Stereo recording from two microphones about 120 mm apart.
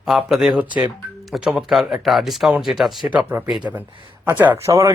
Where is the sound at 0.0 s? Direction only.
Centre (ahead or behind).